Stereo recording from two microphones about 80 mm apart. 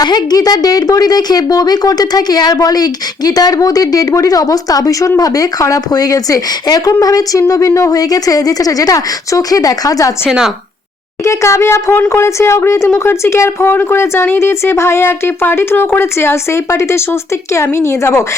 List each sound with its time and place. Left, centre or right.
0.0 s speech: left
10.2 s speech: centre
11.2 s speech: left